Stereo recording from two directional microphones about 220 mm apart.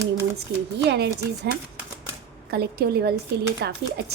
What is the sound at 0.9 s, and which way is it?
Speech, 50° right (ahead or behind).